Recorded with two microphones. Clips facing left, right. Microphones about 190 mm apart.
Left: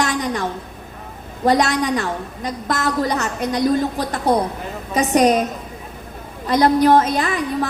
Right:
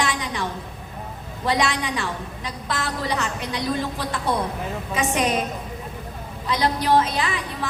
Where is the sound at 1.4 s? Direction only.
45° left (ahead or behind).